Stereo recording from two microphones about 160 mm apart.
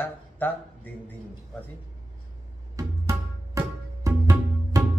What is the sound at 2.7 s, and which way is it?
Tabla, 20° right (ahead or behind).